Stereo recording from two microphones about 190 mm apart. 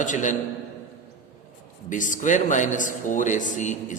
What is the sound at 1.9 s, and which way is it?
A man's voice, 45° left (ahead or behind).